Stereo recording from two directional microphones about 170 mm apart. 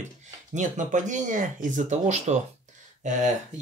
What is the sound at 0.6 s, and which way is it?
Speech, 45° right (ahead or behind).